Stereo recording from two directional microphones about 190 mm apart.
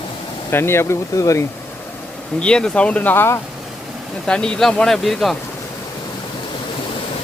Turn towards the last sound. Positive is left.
turn(degrees=0)  # may be behind; listen again after turning